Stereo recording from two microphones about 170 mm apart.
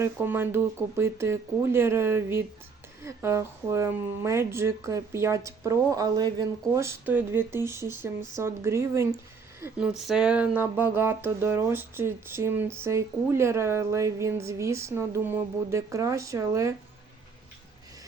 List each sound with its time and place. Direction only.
0.0 s speech: 15° right (ahead or behind)